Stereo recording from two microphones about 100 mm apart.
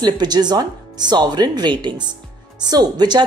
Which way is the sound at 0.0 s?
45° right (ahead or behind).